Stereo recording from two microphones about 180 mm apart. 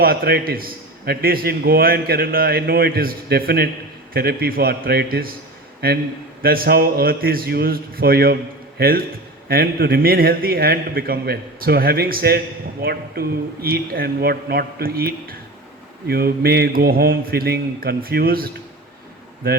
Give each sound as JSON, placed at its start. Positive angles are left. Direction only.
{"t": 0.0, "sound": "a man's voice", "side_deg": -55}